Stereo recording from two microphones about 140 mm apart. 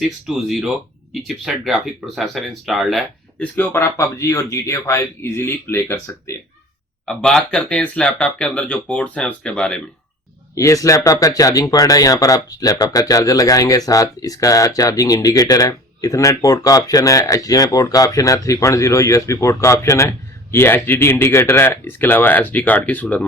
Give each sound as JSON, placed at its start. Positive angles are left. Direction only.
{"t": 0.3, "sound": "speech", "side_deg": 0}
{"t": 7.0, "sound": "speech", "side_deg": 5}
{"t": 10.5, "sound": "speech", "side_deg": 20}